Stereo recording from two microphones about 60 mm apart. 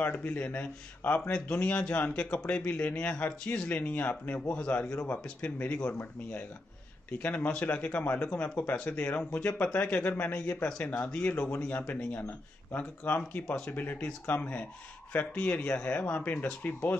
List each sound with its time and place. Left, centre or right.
0.2 s a man's voice: left